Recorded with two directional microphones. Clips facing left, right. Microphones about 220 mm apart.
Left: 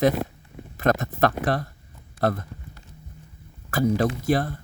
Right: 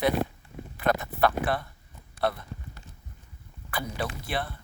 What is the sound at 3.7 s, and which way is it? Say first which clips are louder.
Speech: left 11 dB; 45° left (ahead or behind).